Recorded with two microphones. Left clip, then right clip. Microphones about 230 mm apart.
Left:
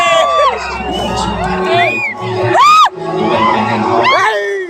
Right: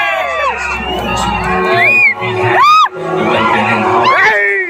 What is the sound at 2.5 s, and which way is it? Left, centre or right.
Music, left.